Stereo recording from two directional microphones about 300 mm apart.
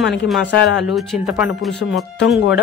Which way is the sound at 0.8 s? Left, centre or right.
Centre.